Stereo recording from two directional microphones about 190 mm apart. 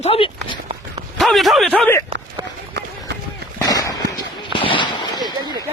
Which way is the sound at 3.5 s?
20° left (ahead or behind).